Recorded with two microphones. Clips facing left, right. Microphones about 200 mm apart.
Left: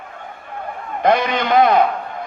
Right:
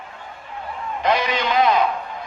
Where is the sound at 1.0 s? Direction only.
55° left (ahead or behind).